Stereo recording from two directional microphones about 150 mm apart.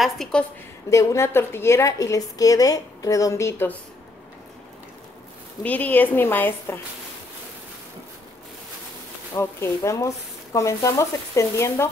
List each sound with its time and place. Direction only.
0.0 s a woman's voice: 5° left (ahead or behind)
0.8 s a woman's voice: 20° left (ahead or behind)
5.6 s a woman's voice: 10° left (ahead or behind)
9.3 s a woman's voice: 20° left (ahead or behind)